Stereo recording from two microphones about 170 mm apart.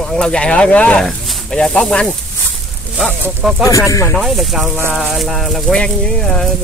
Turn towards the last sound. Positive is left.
turn(degrees=5)  # may be behind; listen again after turning